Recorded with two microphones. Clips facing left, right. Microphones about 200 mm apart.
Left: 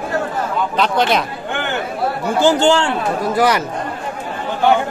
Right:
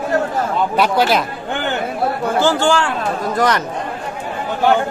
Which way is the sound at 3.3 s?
10° left (ahead or behind).